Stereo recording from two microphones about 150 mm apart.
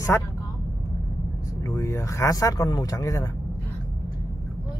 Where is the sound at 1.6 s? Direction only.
20° left (ahead or behind).